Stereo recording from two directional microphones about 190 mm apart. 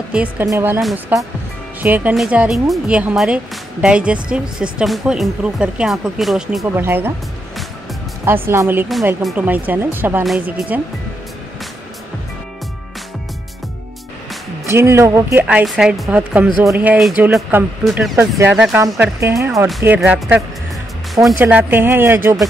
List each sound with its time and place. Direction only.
0.1 s speech: 5° right (ahead or behind)
0.7 s speech: centre (ahead or behind)
8.3 s speech: 10° right (ahead or behind)
8.8 s speech: centre (ahead or behind)
14.7 s speech: 15° right (ahead or behind)